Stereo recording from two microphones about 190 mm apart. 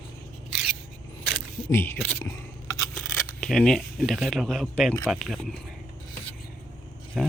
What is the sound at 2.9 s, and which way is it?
Speech, centre (ahead or behind).